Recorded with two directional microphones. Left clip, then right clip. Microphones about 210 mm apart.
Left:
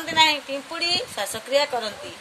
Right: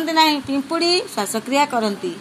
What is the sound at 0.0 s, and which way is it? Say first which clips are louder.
A woman's voice: right 3 dB; 20° right (ahead or behind).